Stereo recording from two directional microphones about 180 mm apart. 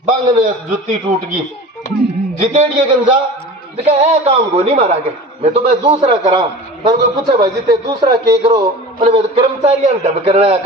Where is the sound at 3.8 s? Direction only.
35° right (ahead or behind).